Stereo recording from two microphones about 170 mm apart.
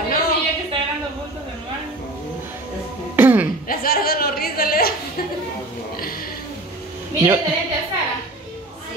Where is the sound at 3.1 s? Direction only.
10° right (ahead or behind).